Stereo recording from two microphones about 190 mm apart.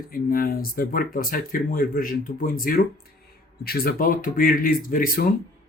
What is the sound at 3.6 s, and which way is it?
Speech, 55° left (ahead or behind).